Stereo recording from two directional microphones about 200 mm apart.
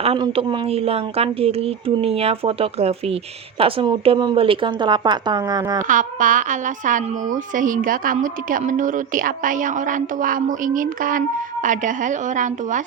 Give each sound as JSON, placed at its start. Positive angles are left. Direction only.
{"t": 0.0, "sound": "speech", "side_deg": -30}
{"t": 5.9, "sound": "a woman's voice", "side_deg": -40}